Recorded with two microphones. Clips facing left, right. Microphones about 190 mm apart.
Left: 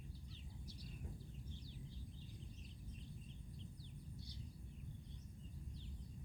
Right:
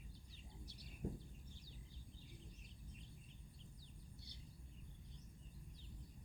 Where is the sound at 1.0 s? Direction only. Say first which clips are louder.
Right 12 dB; 40° right (ahead or behind).